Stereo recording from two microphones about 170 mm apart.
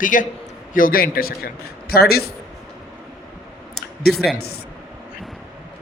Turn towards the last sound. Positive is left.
turn(degrees=70)  # may be behind; listen again after turning